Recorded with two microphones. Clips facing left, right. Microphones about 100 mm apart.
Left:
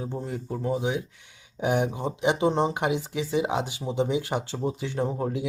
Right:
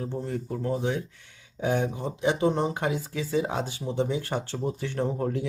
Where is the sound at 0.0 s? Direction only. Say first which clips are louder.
Right 1 dB; 15° left (ahead or behind).